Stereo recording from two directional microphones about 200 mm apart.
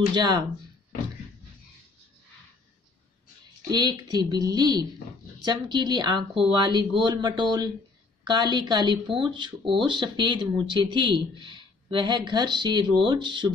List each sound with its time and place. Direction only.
0.1 s speech: 20° right (ahead or behind)
3.7 s speech: 20° right (ahead or behind)